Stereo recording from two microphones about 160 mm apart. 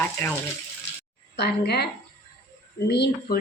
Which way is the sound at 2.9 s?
90° left.